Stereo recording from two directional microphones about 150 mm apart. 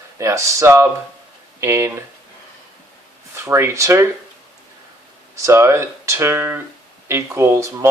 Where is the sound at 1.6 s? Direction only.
20° right (ahead or behind).